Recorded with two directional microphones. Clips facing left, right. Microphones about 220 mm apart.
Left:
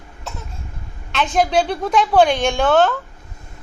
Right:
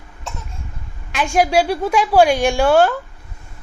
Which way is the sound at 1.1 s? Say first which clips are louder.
Right 1 dB; 10° right (ahead or behind).